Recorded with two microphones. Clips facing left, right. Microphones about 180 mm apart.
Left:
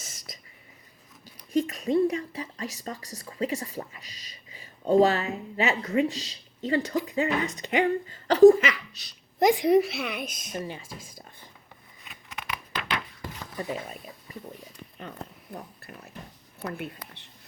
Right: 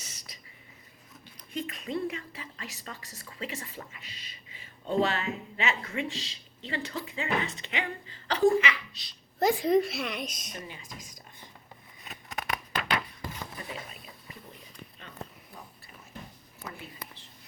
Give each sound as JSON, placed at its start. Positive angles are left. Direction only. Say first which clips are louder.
{"t": 1.5, "sound": "a woman's voice", "louder": "left 10 dB", "side_deg": 45}
{"t": 9.4, "sound": "a woman's voice", "louder": "left 4 dB", "side_deg": 15}
{"t": 10.6, "sound": "a woman's voice", "louder": "left 9 dB", "side_deg": 40}
{"t": 12.0, "sound": "scissors", "louder": "right 3 dB", "side_deg": -45}
{"t": 15.5, "sound": "a woman's voice", "louder": "left 9 dB", "side_deg": 60}